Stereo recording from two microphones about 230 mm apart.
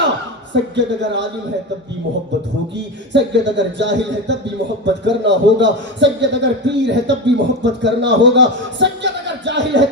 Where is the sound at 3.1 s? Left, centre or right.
Right.